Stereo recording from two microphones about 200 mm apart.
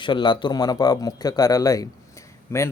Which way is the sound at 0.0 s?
25° left (ahead or behind).